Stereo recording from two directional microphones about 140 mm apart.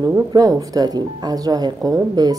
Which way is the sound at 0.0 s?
25° right (ahead or behind).